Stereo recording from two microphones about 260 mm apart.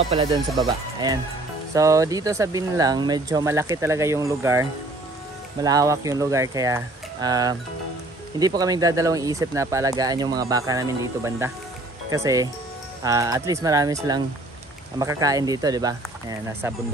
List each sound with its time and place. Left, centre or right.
0.1 s speech: right
1.7 s speech: centre